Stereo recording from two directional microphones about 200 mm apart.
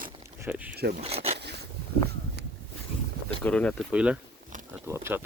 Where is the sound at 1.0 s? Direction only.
30° right (ahead or behind).